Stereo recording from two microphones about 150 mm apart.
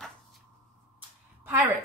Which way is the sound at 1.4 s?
15° right (ahead or behind).